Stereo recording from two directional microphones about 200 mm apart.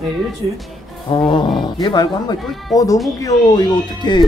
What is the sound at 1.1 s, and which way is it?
Speech, 25° left (ahead or behind).